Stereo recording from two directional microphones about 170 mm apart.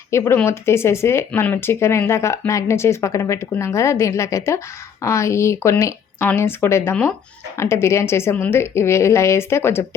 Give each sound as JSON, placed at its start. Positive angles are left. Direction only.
{"t": 0.1, "sound": "speech", "side_deg": 15}